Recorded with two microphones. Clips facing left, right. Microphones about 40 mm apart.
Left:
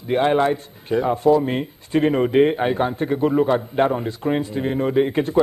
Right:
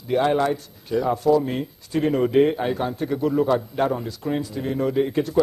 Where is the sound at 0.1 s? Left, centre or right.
Left.